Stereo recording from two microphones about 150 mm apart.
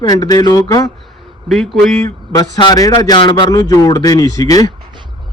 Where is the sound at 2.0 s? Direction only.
25° left (ahead or behind).